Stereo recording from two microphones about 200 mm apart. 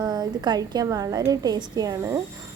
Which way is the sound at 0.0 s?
20° right (ahead or behind).